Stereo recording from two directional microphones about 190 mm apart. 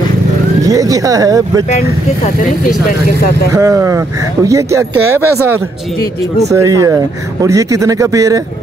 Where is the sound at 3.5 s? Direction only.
15° right (ahead or behind).